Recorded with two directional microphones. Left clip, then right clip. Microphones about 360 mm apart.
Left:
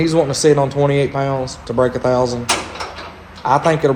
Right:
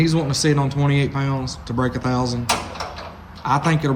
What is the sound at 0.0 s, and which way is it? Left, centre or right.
A man's voice, centre.